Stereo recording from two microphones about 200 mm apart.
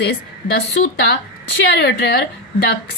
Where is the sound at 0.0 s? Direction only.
55° left (ahead or behind).